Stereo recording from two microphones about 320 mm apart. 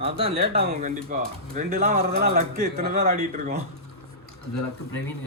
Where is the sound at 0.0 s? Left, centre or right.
Centre.